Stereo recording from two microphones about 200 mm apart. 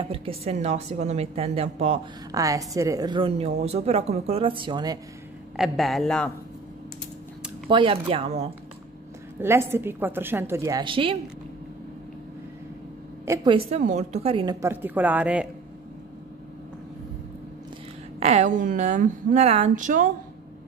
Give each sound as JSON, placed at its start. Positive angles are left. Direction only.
{"t": 0.0, "sound": "a woman's voice", "side_deg": -25}
{"t": 2.3, "sound": "a woman's voice", "side_deg": -15}
{"t": 5.6, "sound": "a man's voice", "side_deg": 0}
{"t": 7.7, "sound": "a woman's voice", "side_deg": -25}
{"t": 9.4, "sound": "a woman's voice", "side_deg": -10}
{"t": 13.2, "sound": "a woman's voice", "side_deg": -20}
{"t": 18.2, "sound": "a woman's voice", "side_deg": -35}